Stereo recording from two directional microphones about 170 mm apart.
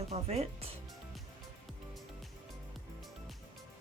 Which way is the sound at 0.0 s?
40° right (ahead or behind).